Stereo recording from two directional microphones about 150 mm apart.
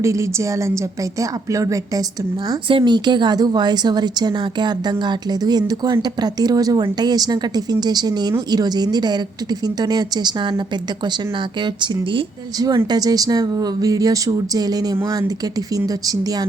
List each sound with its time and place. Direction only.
0.0 s a woman's voice: 20° right (ahead or behind)
2.5 s a woman's voice: 30° right (ahead or behind)
11.6 s a woman's voice: 30° right (ahead or behind)